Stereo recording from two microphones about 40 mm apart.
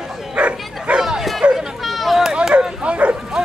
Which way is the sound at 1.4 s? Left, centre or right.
Right.